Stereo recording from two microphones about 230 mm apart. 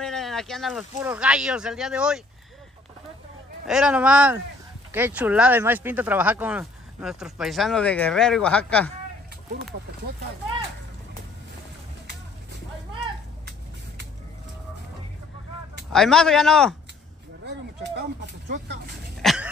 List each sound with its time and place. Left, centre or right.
0.0 s speech: centre
3.6 s speech: centre
15.9 s speech: centre
17.9 s speech: right
19.2 s dog: centre